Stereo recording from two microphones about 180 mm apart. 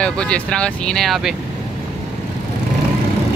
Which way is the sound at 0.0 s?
5° left (ahead or behind).